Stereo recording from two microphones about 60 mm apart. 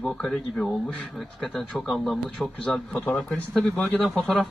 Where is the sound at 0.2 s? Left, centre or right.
Centre.